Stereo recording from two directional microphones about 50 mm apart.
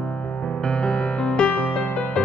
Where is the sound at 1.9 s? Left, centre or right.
Left.